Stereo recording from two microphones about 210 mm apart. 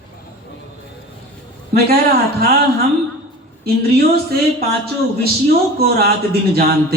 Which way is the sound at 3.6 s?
45° right (ahead or behind).